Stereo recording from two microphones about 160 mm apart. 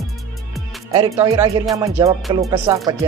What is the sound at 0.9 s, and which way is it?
Speech, 25° right (ahead or behind).